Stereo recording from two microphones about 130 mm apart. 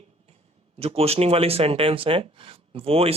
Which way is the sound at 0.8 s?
50° right (ahead or behind).